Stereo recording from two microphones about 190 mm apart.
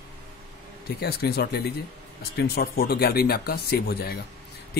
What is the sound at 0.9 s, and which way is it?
Speech, 55° left (ahead or behind).